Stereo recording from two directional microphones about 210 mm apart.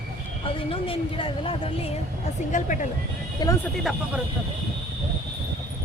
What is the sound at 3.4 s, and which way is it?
Speech, 20° left (ahead or behind).